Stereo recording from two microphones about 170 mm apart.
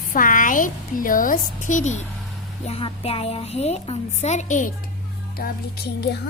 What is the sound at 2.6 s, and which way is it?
A woman's voice, 35° left (ahead or behind).